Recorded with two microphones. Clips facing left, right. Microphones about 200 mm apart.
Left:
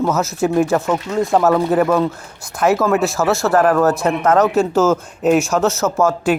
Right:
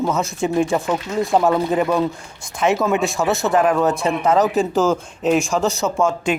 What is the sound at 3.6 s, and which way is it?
Speech, 10° right (ahead or behind).